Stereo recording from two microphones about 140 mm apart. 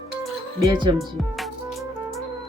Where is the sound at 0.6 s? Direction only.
30° right (ahead or behind).